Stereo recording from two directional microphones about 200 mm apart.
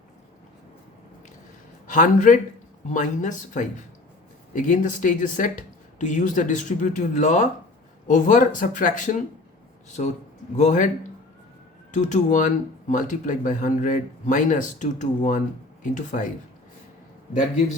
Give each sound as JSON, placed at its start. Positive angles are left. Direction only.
{"t": 1.9, "sound": "speech", "side_deg": 40}
{"t": 11.9, "sound": "speech", "side_deg": 35}